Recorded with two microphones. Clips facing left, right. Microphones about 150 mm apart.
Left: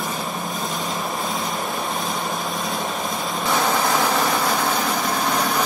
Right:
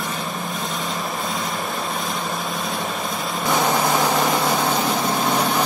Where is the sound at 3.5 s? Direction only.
15° right (ahead or behind).